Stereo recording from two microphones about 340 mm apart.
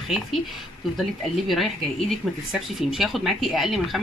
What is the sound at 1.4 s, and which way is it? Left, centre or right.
Speech, centre.